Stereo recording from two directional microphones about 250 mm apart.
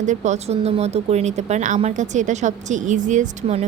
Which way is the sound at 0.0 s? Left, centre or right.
Right.